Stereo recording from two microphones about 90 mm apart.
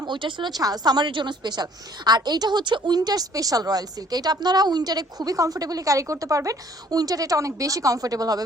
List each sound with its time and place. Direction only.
0.0 s a woman's voice: 65° right (ahead or behind); by 8.4 s 45° right (ahead or behind)